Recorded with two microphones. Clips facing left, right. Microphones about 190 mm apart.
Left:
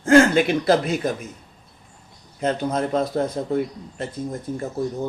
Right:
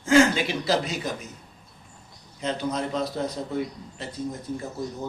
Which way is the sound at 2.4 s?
55° left (ahead or behind).